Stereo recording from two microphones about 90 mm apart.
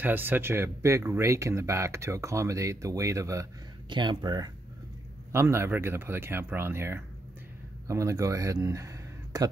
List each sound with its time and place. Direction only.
0.0 s speech: 20° right (ahead or behind)
3.9 s speech: 60° right (ahead or behind)
5.3 s speech: 30° right (ahead or behind)